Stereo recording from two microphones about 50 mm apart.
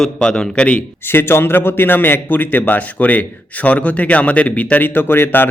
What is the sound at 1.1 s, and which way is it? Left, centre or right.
A man's voice, left.